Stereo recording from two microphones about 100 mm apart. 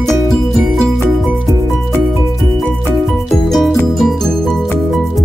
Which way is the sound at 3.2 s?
5° left (ahead or behind).